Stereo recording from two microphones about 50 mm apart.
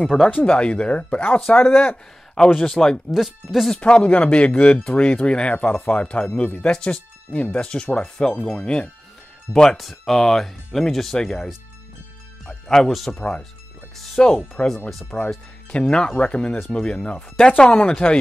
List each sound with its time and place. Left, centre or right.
0.0 s speech: centre
0.3 s speech: left
1.5 s speech: left
2.3 s speech: centre
3.1 s speech: centre
3.7 s speech: left
9.5 s speech: centre
12.6 s speech: centre
14.6 s speech: left